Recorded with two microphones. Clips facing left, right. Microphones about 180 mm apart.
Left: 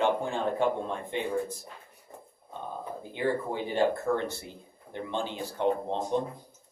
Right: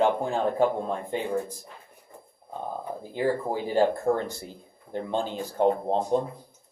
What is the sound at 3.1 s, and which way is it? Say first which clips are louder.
Speech: right 3 dB; 40° right (ahead or behind).